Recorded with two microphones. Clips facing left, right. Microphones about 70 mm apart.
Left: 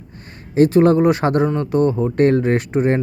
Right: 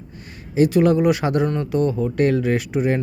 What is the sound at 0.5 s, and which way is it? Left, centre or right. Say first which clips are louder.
Speech: left 3 dB; left.